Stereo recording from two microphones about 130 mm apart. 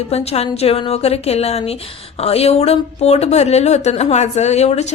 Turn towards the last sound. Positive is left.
turn(degrees=55)  # may be behind; listen again after turning